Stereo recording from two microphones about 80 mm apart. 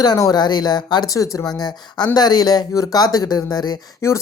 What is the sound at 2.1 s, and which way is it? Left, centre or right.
Speech, left.